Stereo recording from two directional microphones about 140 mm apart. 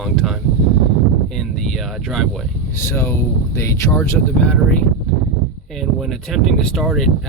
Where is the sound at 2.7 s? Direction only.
15° left (ahead or behind).